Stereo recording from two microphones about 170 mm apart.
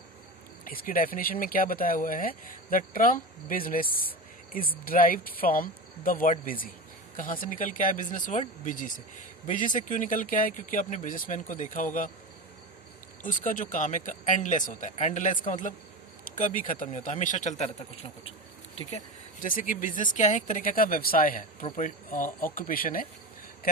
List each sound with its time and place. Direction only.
0.6 s speech: 55° left (ahead or behind)
13.2 s speech: 50° left (ahead or behind)
19.4 s speech: 50° left (ahead or behind)